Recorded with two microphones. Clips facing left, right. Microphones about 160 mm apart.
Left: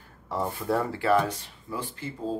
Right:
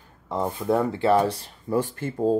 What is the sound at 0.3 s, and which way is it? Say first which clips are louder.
Speech: right 4 dB; 20° right (ahead or behind).